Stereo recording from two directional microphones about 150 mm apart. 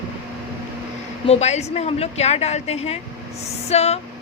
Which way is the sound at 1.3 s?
45° left (ahead or behind).